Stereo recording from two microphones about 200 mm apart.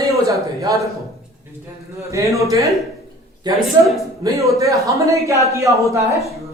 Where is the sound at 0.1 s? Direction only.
15° right (ahead or behind).